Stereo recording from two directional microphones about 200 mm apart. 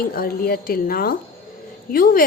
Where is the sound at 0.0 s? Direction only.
45° left (ahead or behind).